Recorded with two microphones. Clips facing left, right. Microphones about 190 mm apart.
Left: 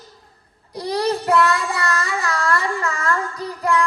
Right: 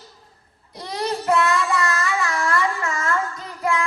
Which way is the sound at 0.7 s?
35° left (ahead or behind).